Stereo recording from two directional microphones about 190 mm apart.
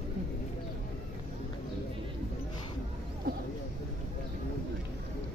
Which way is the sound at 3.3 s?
55° right (ahead or behind).